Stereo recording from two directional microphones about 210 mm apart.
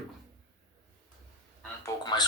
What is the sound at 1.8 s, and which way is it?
Speech, 20° left (ahead or behind).